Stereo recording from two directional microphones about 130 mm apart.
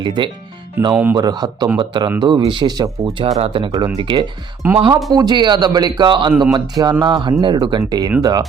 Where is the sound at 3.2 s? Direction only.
45° right (ahead or behind).